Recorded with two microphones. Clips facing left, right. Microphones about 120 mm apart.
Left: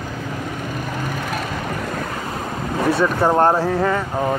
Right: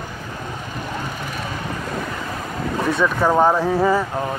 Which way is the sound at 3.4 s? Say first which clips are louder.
Right 2 dB; centre (ahead or behind).